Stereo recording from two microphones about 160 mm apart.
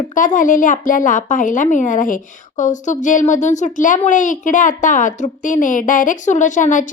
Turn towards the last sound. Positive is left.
turn(degrees=50)  # may be behind; listen again after turning